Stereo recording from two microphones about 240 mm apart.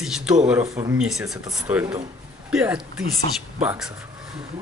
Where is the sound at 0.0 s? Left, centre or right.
Centre.